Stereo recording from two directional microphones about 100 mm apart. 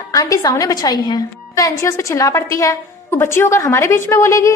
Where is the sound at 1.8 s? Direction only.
30° left (ahead or behind).